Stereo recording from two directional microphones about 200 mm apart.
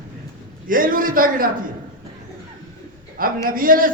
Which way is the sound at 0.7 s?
45° right (ahead or behind).